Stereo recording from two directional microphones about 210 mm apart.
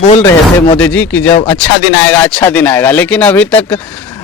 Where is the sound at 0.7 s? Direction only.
5° left (ahead or behind).